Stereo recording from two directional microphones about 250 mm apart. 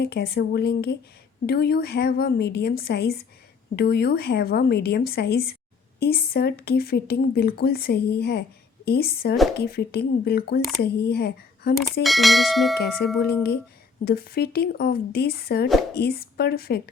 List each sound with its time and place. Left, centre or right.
0.0 s speech: left
12.0 s speech: centre
13.1 s speech: left